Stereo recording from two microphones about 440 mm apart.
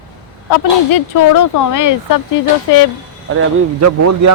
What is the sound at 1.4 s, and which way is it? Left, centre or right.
Speech, left.